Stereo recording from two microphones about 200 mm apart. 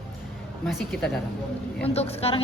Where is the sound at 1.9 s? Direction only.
30° left (ahead or behind).